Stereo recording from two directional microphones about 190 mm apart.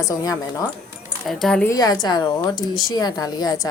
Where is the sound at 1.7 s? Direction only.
20° left (ahead or behind).